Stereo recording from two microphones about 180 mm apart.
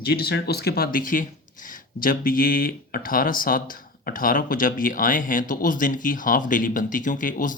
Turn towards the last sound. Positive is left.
turn(degrees=50)  # may be behind; listen again after turning